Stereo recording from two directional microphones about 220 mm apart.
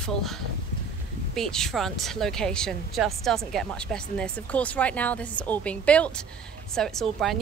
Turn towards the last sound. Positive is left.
turn(degrees=0)  # may be behind; listen again after turning